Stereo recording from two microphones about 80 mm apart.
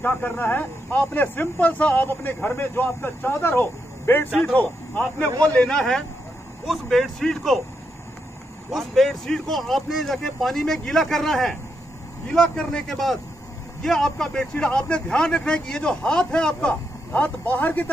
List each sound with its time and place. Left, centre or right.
0.0 s speech: left; by 7.6 s centre
8.7 s speech: centre; by 17.9 s left